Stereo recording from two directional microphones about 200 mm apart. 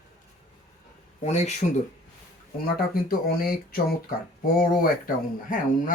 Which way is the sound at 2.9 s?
50° left (ahead or behind).